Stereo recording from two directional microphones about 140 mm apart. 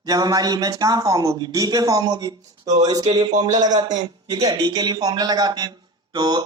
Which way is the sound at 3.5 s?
60° right (ahead or behind).